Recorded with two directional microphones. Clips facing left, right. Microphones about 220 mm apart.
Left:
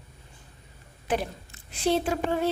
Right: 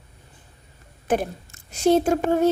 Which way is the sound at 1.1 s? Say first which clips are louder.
Right 5 dB; 45° right (ahead or behind).